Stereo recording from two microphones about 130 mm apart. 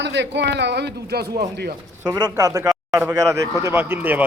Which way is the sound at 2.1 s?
25° right (ahead or behind).